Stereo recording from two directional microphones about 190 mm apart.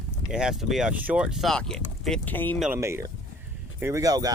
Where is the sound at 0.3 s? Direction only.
5° right (ahead or behind).